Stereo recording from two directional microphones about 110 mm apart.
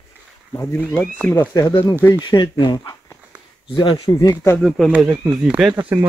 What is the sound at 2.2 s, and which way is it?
Speech, 45° left (ahead or behind).